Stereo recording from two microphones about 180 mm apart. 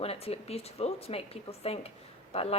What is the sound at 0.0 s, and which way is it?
A woman's voice, 35° left (ahead or behind).